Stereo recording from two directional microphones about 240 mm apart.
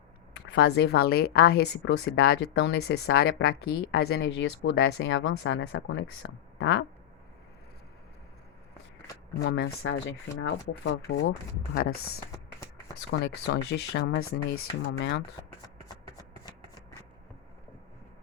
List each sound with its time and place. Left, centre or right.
0.4 s speech: left
9.4 s speech: left
13.1 s speech: left